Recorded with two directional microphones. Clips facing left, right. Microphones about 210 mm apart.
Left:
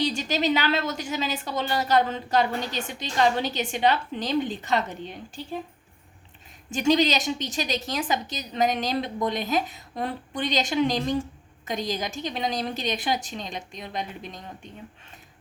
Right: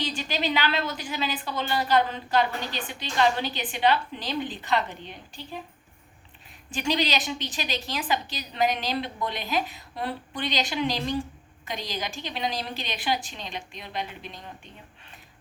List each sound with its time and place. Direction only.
0.0 s a woman's voice: 45° left (ahead or behind)
6.7 s a woman's voice: 45° left (ahead or behind)